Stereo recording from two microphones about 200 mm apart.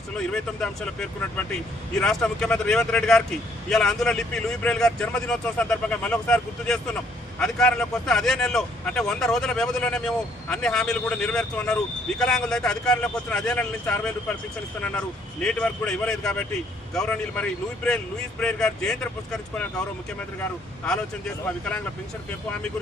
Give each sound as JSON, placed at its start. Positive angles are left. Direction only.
{"t": 0.3, "sound": "speech", "side_deg": 5}